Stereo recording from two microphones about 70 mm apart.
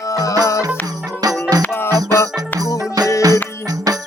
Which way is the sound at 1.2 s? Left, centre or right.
Right.